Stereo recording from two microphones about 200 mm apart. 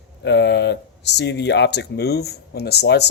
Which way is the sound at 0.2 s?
60° left (ahead or behind).